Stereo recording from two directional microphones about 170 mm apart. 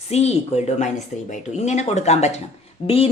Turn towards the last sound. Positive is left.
turn(degrees=35)  # may be behind; listen again after turning